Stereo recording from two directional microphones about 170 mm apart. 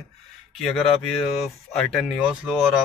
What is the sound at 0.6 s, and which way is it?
Speech, centre (ahead or behind).